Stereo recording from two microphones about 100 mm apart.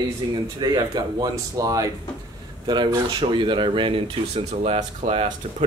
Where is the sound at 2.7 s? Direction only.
50° right (ahead or behind).